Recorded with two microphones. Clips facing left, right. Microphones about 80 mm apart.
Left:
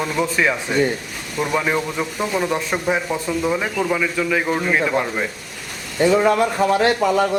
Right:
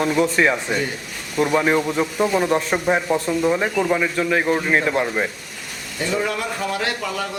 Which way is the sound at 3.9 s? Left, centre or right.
Right.